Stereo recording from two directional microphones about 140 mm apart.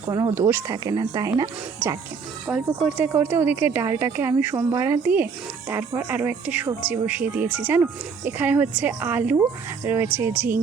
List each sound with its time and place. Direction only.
0.1 s speech: 25° right (ahead or behind)
2.5 s a woman's voice: 10° right (ahead or behind)